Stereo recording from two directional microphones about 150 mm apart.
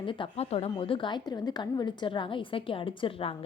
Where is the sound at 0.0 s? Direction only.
35° left (ahead or behind).